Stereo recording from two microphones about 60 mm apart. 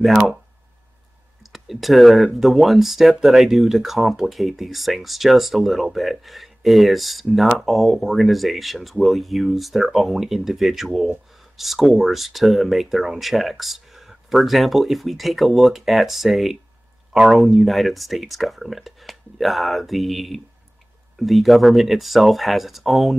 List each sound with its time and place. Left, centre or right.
0.0 s speech: centre
1.4 s speech: centre